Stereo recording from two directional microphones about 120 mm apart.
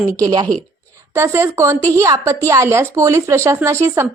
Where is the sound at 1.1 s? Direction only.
25° right (ahead or behind).